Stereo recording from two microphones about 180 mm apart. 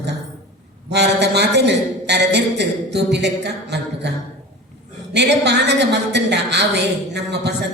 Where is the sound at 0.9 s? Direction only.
70° right (ahead or behind).